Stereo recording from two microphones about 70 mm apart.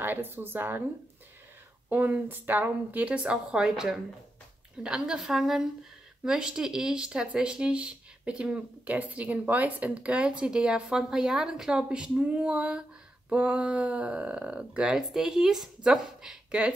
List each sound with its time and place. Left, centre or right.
0.0 s speech: right
1.9 s speech: right